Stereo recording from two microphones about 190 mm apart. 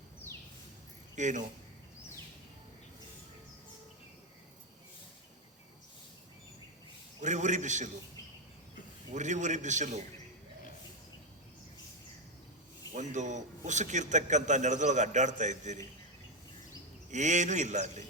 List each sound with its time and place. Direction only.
1.1 s speech: 40° right (ahead or behind)
7.2 s a man's voice: 40° right (ahead or behind)
9.1 s a man's voice: 40° right (ahead or behind)
12.9 s a man's voice: 40° right (ahead or behind)
17.1 s a man's voice: 40° right (ahead or behind)